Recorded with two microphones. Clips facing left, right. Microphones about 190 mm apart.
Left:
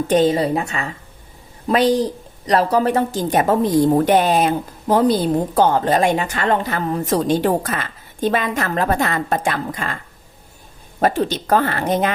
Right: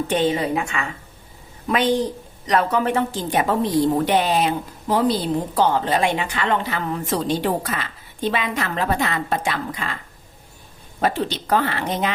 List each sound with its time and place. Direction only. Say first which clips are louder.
0.1 s a woman's voice: left 6 dB; 40° left (ahead or behind)
11.0 s a woman's voice: left 4 dB; 45° left (ahead or behind)